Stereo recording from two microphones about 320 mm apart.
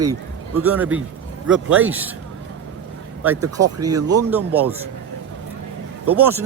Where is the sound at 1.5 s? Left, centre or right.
Centre.